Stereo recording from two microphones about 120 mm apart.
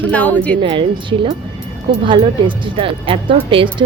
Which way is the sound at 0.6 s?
45° right (ahead or behind).